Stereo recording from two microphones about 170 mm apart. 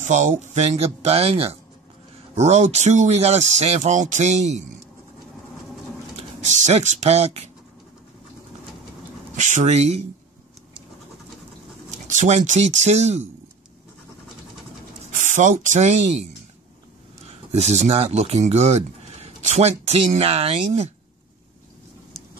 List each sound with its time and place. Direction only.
0.0 s speech: 45° right (ahead or behind)
6.1 s speech: 45° right (ahead or behind)
9.4 s speech: 45° right (ahead or behind)
11.9 s speech: 45° right (ahead or behind)
15.0 s speech: 45° right (ahead or behind)
17.3 s speech: 40° right (ahead or behind)